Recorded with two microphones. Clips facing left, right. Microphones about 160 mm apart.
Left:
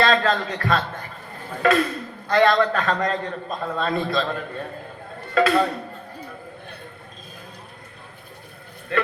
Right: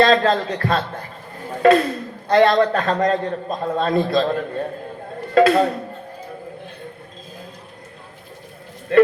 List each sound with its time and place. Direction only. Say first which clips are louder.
0.0 s a man's voice: right 4 dB; 35° right (ahead or behind)